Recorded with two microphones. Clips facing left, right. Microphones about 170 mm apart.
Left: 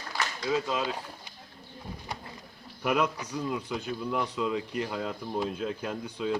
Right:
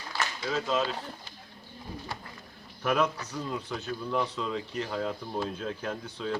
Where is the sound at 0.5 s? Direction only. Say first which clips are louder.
Even; 10° left (ahead or behind).